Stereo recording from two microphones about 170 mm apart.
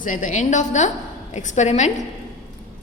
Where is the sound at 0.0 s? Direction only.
50° left (ahead or behind).